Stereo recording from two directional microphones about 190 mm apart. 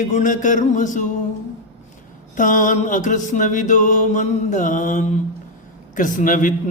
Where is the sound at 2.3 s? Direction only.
45° left (ahead or behind).